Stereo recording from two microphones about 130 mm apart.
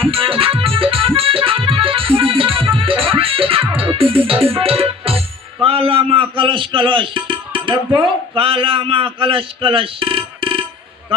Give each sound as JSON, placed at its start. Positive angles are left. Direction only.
{"t": 0.0, "sound": "music", "side_deg": -45}
{"t": 7.9, "sound": "a man's voice", "side_deg": -45}